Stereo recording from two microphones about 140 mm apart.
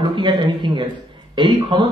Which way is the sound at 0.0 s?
35° right (ahead or behind).